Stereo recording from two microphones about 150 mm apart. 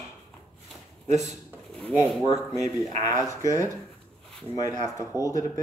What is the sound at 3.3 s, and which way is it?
Speech, 20° left (ahead or behind).